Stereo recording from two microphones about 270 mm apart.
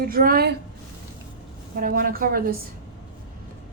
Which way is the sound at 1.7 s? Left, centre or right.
Right.